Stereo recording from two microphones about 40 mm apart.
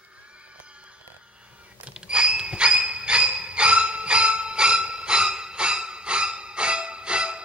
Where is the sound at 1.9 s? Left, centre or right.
Right.